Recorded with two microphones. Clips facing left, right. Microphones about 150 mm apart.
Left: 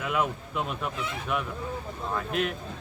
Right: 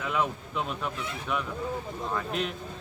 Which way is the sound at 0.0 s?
5° left (ahead or behind).